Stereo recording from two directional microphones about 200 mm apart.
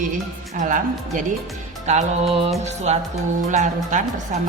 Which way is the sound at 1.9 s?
30° right (ahead or behind).